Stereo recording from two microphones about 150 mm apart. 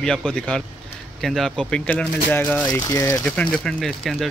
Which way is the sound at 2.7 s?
25° left (ahead or behind).